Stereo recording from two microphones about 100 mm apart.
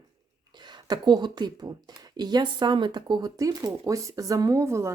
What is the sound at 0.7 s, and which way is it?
Speech, 45° right (ahead or behind).